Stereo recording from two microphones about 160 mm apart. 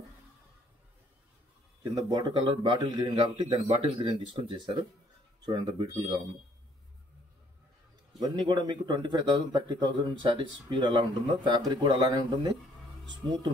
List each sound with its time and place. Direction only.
1.8 s speech: 25° right (ahead or behind)
3.6 s speech: 40° right (ahead or behind)
4.5 s speech: 30° right (ahead or behind)
8.2 s speech: 25° right (ahead or behind)